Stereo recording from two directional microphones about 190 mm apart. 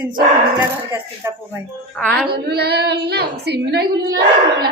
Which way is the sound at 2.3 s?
60° right (ahead or behind).